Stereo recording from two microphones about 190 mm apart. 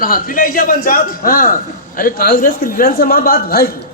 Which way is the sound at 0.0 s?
50° left (ahead or behind).